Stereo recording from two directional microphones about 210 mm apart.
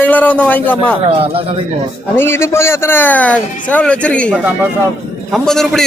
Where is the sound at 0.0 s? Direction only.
5° left (ahead or behind).